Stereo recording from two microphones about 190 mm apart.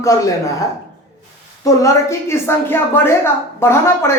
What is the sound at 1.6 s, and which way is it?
A woman's voice, 15° left (ahead or behind).